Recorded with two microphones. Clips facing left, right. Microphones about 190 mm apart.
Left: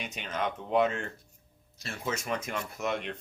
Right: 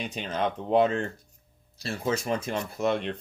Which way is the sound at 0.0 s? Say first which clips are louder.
Right 4 dB; 30° right (ahead or behind).